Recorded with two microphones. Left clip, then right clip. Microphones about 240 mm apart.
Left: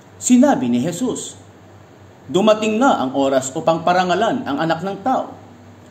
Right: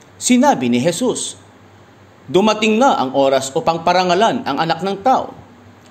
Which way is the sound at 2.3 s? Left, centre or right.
Right.